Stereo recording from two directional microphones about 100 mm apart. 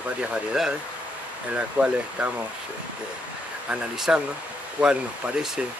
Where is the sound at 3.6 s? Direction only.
5° right (ahead or behind).